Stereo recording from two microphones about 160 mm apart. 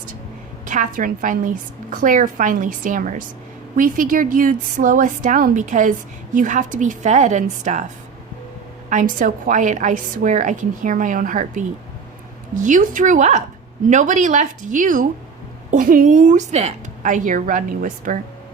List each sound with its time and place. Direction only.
0.6 s a woman's voice: 55° right (ahead or behind)
8.9 s a woman's voice: 55° right (ahead or behind)
12.6 s a woman's voice: 55° right (ahead or behind)